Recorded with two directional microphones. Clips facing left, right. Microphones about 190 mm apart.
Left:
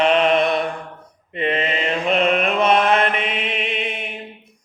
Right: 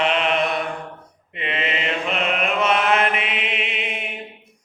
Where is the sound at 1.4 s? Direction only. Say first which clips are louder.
Left 5 dB; 40° left (ahead or behind).